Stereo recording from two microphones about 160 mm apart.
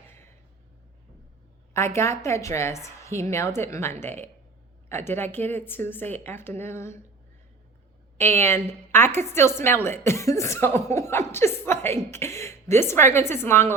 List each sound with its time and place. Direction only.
1.7 s speech: 15° left (ahead or behind)
8.2 s speech: 15° left (ahead or behind)